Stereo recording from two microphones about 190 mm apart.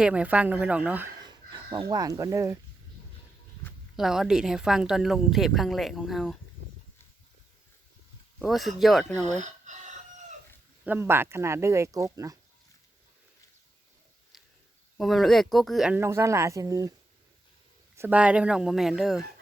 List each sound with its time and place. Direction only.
0.0 s speech: 5° right (ahead or behind)
1.2 s speech: 20° right (ahead or behind)
3.9 s a woman's voice: centre (ahead or behind)
8.4 s a woman's voice: centre (ahead or behind)
9.2 s speech: 40° right (ahead or behind)
10.8 s speech: 10° right (ahead or behind)
14.3 s a sound: centre (ahead or behind)
14.9 s a woman's voice: centre (ahead or behind); by 16.9 s 20° right (ahead or behind)
17.9 s a woman's voice: 10° right (ahead or behind)